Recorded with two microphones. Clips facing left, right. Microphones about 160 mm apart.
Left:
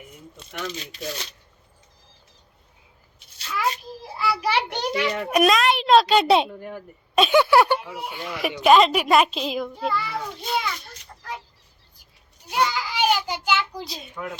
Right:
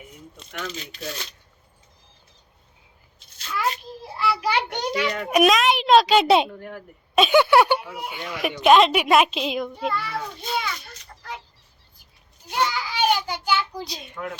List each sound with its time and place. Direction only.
0.3 s speech: 10° left (ahead or behind)
3.5 s a sound: centre (ahead or behind)
4.9 s a child's voice: 5° left (ahead or behind)
12.5 s a child's voice: 5° left (ahead or behind)